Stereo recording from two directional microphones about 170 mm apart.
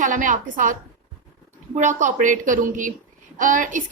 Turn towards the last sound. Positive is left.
turn(degrees=-50)  # may be behind; listen again after turning